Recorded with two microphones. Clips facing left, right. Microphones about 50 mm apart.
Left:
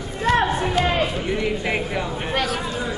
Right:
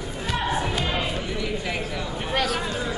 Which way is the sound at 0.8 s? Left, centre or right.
Left.